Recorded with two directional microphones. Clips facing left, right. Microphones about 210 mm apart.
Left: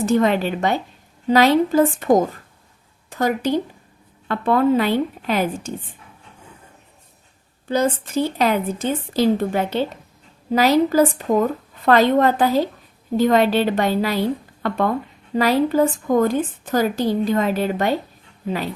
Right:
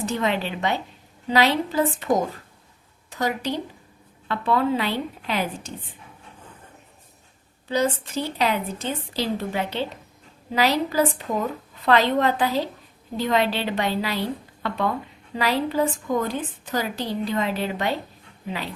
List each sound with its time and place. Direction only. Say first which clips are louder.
0.0 s a woman's voice: left 7 dB; 45° left (ahead or behind)
7.7 s a woman's voice: left 4 dB; 50° left (ahead or behind)